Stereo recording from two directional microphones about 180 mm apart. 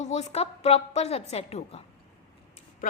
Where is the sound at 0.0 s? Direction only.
40° left (ahead or behind).